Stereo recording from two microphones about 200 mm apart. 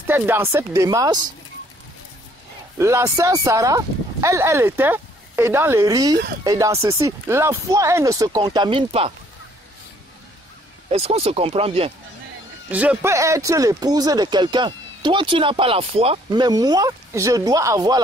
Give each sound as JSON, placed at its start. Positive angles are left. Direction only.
{"t": 0.0, "sound": "speech", "side_deg": -10}
{"t": 2.8, "sound": "speech", "side_deg": -15}
{"t": 10.9, "sound": "speech", "side_deg": -30}
{"t": 12.7, "sound": "speech", "side_deg": -10}